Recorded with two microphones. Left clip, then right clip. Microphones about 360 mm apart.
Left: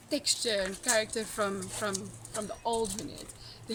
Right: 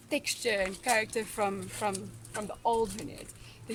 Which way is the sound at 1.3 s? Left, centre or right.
Centre.